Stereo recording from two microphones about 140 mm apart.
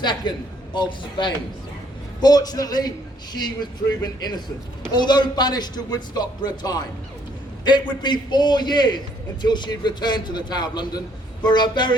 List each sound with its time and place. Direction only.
0.0 s a man's voice: 35° left (ahead or behind)
4.0 s a man's voice: 30° left (ahead or behind)